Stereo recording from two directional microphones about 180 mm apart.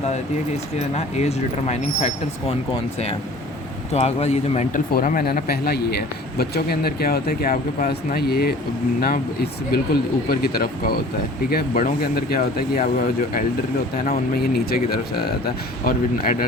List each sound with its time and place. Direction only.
0.9 s speech: 35° left (ahead or behind)
3.9 s speech: 35° left (ahead or behind)
4.9 s a man's voice: 55° left (ahead or behind)
14.1 s a man's voice: 60° left (ahead or behind)